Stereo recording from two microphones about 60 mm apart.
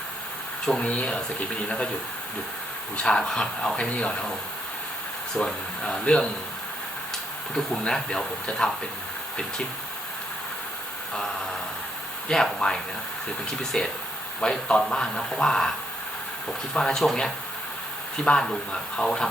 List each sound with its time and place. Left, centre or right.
0.6 s speech: centre
3.0 s speech: centre
5.4 s speech: centre
7.5 s speech: centre
11.1 s vehicle: centre
12.3 s speech: centre
16.7 s speech: centre